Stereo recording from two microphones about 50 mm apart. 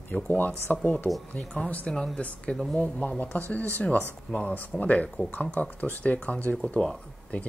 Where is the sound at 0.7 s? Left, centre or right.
Left.